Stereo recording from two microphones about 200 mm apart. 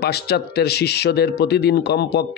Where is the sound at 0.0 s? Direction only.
55° left (ahead or behind).